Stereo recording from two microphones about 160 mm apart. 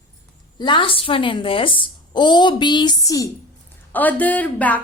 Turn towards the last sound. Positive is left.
turn(degrees=10)  # may be behind; listen again after turning